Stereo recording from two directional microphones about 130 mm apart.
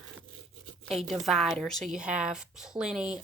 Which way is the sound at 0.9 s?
Centre (ahead or behind).